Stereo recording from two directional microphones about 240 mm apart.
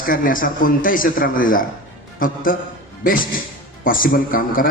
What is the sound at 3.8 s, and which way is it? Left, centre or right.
Speech, left.